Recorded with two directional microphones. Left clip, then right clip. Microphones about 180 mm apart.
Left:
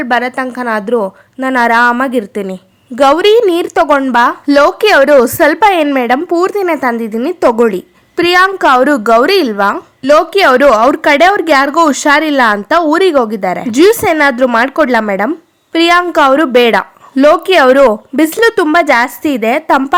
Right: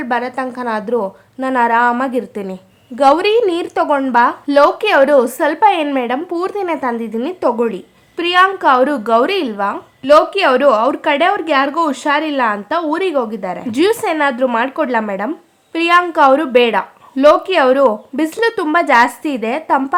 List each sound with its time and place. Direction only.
0.0 s a woman's voice: 25° left (ahead or behind)